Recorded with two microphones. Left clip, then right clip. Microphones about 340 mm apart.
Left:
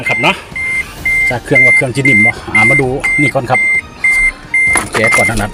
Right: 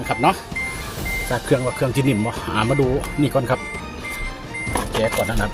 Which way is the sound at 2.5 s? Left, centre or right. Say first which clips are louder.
Left 11 dB; right.